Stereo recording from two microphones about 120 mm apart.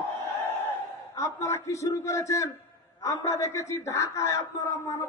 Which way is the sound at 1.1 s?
25° left (ahead or behind).